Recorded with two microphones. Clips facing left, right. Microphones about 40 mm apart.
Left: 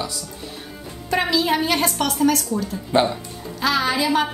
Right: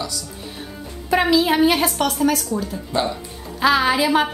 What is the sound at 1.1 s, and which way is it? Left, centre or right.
A woman's voice, centre.